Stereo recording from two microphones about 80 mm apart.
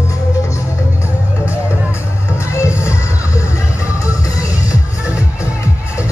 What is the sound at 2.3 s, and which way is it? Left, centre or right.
Music, left.